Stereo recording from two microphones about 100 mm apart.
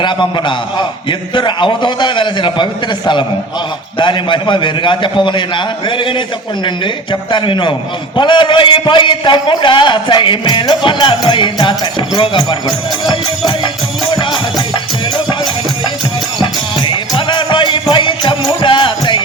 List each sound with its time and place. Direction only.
0.0 s a man's voice: 50° left (ahead or behind)
3.9 s a man's voice: 50° left (ahead or behind)
16.4 s music: 55° left (ahead or behind)